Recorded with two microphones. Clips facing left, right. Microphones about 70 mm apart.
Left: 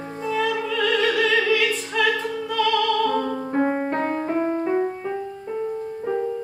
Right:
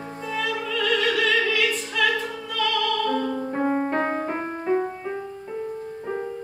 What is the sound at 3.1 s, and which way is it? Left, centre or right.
Music, centre.